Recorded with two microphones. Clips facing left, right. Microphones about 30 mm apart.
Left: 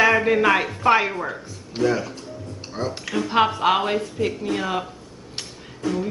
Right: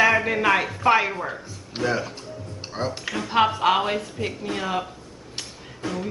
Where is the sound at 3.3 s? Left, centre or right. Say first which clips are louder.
Even; centre.